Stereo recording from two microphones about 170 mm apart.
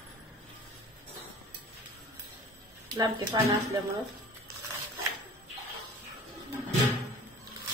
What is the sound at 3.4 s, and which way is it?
Speech, 25° right (ahead or behind).